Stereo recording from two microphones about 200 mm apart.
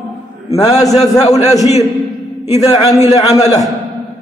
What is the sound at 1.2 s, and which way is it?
Speech, 35° left (ahead or behind).